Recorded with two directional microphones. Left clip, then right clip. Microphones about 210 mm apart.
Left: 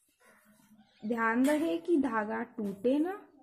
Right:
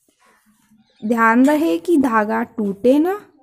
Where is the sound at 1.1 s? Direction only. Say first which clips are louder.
Right 14 dB; 45° right (ahead or behind).